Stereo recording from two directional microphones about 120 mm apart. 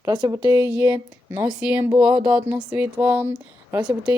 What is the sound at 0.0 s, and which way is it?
Speech, 30° right (ahead or behind).